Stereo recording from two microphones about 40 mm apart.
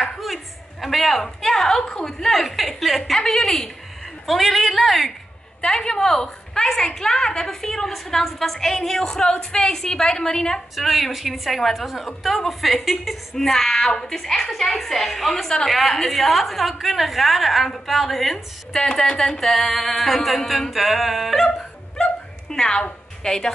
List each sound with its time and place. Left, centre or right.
0.2 s a man's voice: centre
3.0 s a woman's voice: centre
4.3 s a woman's voice: centre
5.8 s a woman's voice: centre
10.8 s a woman's voice: centre
18.7 s a woman's voice: centre
21.9 s dog: centre
23.2 s a woman's voice: centre